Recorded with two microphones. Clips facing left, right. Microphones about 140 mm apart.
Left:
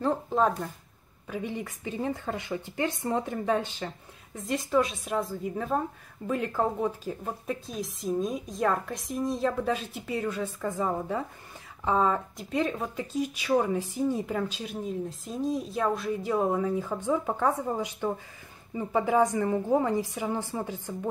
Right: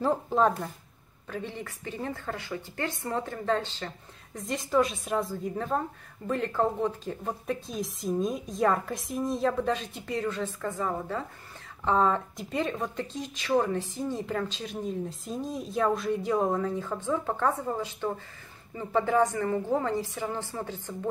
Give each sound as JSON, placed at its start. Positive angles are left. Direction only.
{"t": 0.0, "sound": "a woman's voice", "side_deg": 0}
{"t": 1.2, "sound": "speech", "side_deg": 10}
{"t": 4.4, "sound": "a woman's voice", "side_deg": 0}